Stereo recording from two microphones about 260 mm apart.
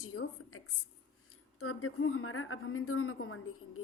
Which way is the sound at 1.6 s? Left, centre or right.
Left.